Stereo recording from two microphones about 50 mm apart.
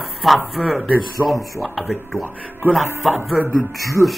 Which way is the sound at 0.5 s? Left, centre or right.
Centre.